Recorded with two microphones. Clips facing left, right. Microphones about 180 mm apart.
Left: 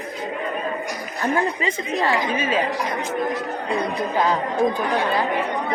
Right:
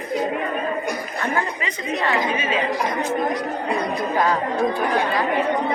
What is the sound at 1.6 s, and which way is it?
Speech, 35° left (ahead or behind).